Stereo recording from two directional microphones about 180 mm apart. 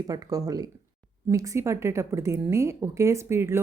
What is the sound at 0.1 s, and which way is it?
Speech, 20° right (ahead or behind).